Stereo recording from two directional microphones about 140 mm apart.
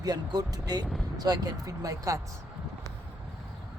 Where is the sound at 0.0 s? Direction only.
30° right (ahead or behind).